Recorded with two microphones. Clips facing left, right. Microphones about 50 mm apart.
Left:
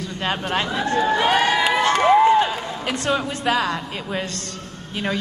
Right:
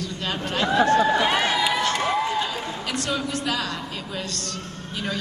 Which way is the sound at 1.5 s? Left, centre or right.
Left.